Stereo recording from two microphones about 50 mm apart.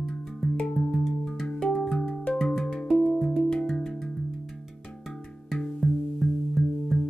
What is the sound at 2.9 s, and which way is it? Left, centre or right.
Music, centre.